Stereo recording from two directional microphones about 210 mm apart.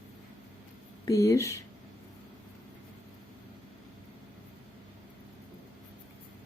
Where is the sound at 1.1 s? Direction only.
15° left (ahead or behind).